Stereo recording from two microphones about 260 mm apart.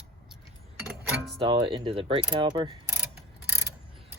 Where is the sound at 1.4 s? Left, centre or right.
Centre.